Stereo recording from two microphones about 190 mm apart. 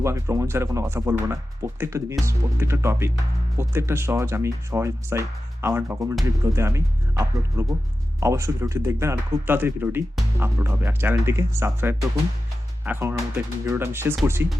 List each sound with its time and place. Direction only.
0.0 s speech: 15° right (ahead or behind)